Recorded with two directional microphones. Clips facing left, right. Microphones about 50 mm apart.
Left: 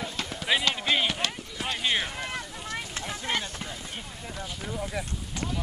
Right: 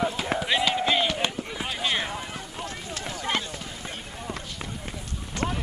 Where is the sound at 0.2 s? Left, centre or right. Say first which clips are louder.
Right 6 dB; centre.